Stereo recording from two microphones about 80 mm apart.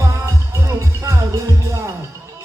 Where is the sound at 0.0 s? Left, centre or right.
Right.